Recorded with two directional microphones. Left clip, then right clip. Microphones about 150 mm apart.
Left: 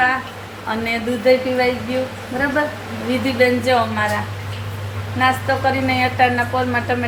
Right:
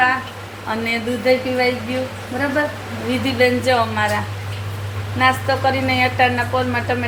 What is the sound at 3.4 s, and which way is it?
Speech, 55° right (ahead or behind).